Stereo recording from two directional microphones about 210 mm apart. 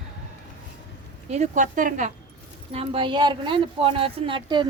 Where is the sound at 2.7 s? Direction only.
25° right (ahead or behind).